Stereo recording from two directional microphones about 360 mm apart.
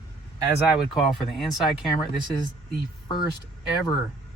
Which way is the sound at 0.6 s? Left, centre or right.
Centre.